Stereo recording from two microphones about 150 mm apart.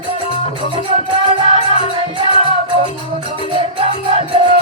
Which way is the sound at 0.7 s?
30° right (ahead or behind).